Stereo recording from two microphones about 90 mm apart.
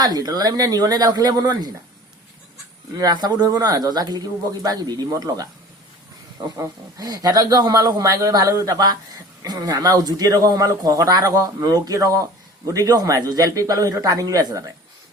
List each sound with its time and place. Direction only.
0.0 s speech: 45° right (ahead or behind)
2.9 s speech: 45° right (ahead or behind)
6.4 s speech: 60° right (ahead or behind)
7.0 s speech: 45° right (ahead or behind)